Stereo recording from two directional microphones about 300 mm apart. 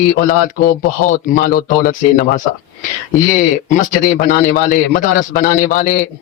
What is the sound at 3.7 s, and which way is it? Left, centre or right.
A man's voice, left.